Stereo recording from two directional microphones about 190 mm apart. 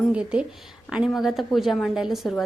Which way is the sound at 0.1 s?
5° right (ahead or behind).